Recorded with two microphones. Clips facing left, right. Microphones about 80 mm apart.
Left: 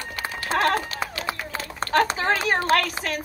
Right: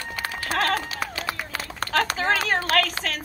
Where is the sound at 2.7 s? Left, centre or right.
Centre.